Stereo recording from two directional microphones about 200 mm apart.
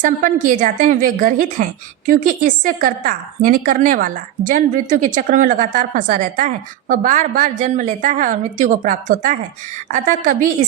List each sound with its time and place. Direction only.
0.0 s a woman's voice: 40° right (ahead or behind)